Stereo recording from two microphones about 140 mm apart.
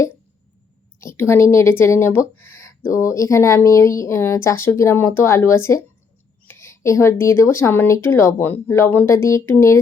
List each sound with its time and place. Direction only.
0.9 s speech: 20° left (ahead or behind)